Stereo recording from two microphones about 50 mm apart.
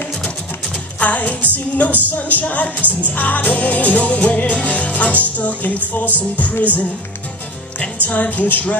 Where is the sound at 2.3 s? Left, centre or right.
Left.